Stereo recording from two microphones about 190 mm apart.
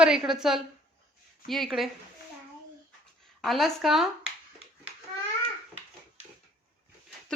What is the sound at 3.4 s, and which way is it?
Speech, centre (ahead or behind).